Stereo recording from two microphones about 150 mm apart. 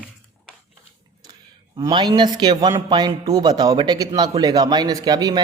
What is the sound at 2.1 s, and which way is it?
A man's voice, 30° right (ahead or behind).